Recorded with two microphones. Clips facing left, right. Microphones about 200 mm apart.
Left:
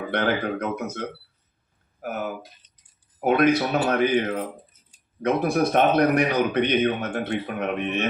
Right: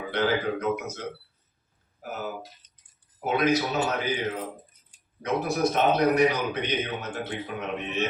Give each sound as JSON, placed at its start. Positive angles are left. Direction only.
{"t": 0.1, "sound": "a man's voice", "side_deg": 60}
{"t": 5.2, "sound": "a man's voice", "side_deg": 60}